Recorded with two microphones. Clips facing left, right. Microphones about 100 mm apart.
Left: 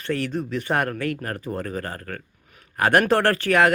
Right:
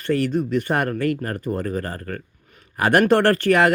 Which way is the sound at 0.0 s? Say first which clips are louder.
Right 5 dB; centre (ahead or behind).